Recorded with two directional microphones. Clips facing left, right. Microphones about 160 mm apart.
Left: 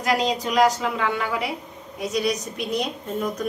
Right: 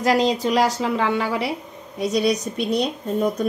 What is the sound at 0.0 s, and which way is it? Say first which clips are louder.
A woman's voice: right 4 dB; 35° right (ahead or behind).